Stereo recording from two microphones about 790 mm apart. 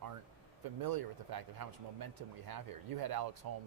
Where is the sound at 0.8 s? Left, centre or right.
Right.